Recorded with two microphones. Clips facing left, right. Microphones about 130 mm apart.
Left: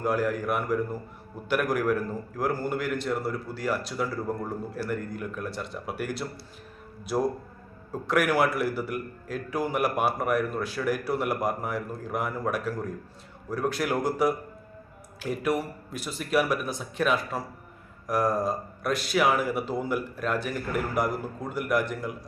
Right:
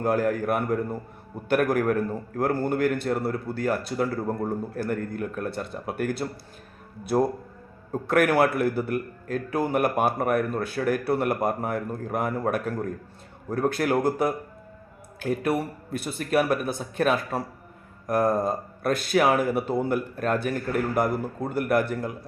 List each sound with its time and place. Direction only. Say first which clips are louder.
0.0 s a man's voice: right 3 dB; 50° right (ahead or behind)
8.0 s a man's voice: right 3 dB; 55° right (ahead or behind)